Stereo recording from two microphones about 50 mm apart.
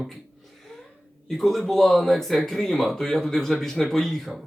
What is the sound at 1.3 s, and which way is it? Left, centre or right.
Speech, centre.